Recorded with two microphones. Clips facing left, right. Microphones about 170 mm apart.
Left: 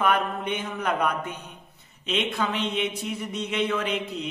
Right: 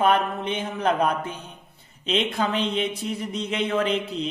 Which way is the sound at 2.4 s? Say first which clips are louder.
Right 2 dB; 30° right (ahead or behind).